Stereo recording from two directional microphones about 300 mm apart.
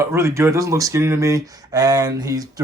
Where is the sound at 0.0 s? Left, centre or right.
Centre.